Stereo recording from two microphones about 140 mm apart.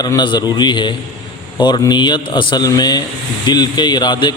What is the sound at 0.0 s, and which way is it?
A man's voice, 30° left (ahead or behind).